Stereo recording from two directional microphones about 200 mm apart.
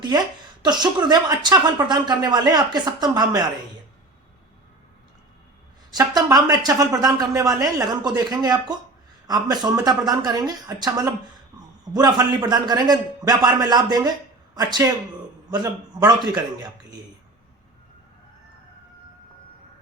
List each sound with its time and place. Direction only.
0.6 s speech: 20° right (ahead or behind)
5.9 s a man's voice: 20° right (ahead or behind)